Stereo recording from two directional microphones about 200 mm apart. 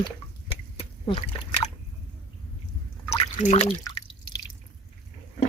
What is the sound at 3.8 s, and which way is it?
Drip, 25° left (ahead or behind).